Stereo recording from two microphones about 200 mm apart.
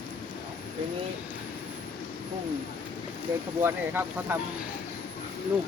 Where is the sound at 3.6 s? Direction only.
10° right (ahead or behind).